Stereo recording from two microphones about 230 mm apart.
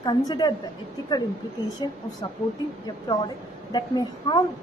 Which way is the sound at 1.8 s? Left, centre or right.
Centre.